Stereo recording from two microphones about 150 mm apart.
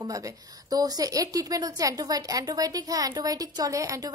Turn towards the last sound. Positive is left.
turn(degrees=-20)  # may be behind; listen again after turning